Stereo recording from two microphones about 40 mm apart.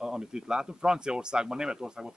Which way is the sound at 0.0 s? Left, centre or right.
Centre.